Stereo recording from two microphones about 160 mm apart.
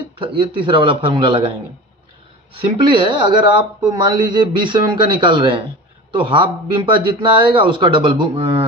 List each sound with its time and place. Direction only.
0.2 s speech: 30° right (ahead or behind)
2.5 s speech: 30° right (ahead or behind)